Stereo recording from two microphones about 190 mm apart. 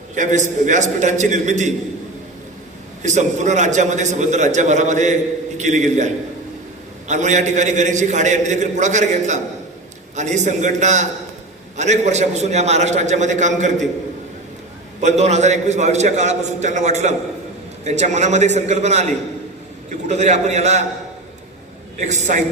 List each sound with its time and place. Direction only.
0.1 s a man's voice: 40° right (ahead or behind)
3.0 s a man's voice: 40° right (ahead or behind)
7.1 s a man's voice: 40° right (ahead or behind)
15.0 s a man's voice: 35° right (ahead or behind)
22.0 s a man's voice: 40° right (ahead or behind)